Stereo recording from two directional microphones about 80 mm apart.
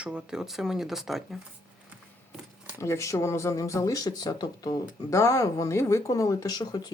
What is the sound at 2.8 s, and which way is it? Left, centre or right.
Speech, left.